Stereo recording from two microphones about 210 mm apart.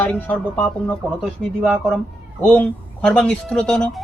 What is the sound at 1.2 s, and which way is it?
Speech, 5° right (ahead or behind).